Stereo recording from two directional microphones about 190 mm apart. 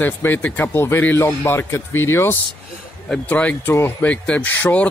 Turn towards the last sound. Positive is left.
turn(degrees=10)  # may be behind; listen again after turning